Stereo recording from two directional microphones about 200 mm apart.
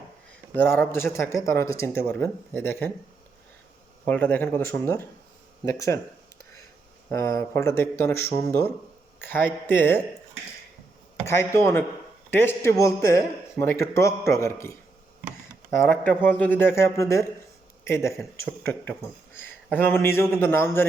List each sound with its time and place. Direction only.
0.5 s speech: 10° left (ahead or behind)
4.0 s speech: 10° left (ahead or behind)
7.1 s speech: 15° left (ahead or behind)
11.3 s speech: 15° left (ahead or behind)
15.9 s speech: 10° left (ahead or behind)